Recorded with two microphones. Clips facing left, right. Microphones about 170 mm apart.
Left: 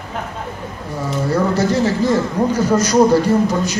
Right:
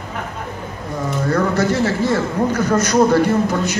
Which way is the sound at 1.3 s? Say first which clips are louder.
Left 1 dB; 10° left (ahead or behind).